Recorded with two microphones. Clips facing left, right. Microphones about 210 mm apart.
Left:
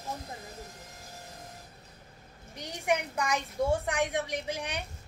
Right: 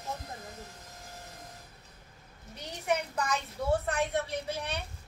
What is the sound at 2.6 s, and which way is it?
A woman's voice, 10° left (ahead or behind).